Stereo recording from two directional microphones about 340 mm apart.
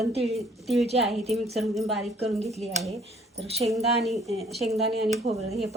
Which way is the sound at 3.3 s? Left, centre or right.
Centre.